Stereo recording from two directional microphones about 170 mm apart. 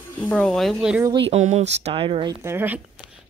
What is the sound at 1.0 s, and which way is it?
Speech, 35° right (ahead or behind).